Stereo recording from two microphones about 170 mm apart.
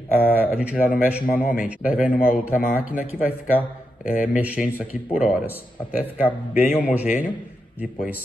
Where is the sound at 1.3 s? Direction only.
50° left (ahead or behind).